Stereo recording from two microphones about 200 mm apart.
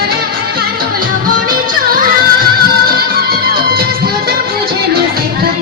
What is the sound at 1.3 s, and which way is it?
Music, 45° right (ahead or behind).